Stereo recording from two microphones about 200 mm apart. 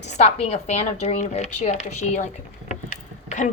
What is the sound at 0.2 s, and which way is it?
A woman's voice, 30° left (ahead or behind).